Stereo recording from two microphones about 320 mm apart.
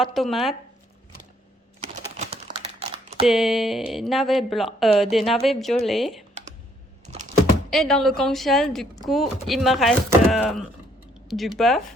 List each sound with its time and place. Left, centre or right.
0.0 s speech: centre
2.1 s typing: centre
3.2 s speech: centre
7.1 s typing: centre
7.7 s speech: centre